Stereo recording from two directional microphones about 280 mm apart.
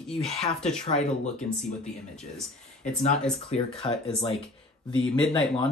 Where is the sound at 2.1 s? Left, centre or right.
Centre.